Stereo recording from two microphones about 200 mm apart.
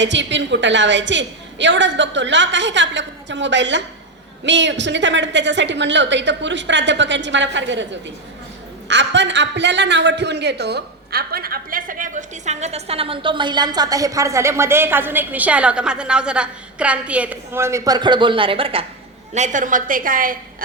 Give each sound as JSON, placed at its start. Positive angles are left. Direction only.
{"t": 0.0, "sound": "a woman's voice", "side_deg": -65}
{"t": 8.9, "sound": "a man's voice", "side_deg": -60}